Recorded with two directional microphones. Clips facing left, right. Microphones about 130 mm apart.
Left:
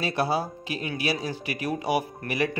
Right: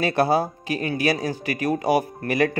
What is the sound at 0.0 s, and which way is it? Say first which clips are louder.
A man's voice: right 6 dB; 50° right (ahead or behind).